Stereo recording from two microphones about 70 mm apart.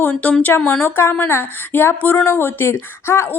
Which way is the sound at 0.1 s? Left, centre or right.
Centre.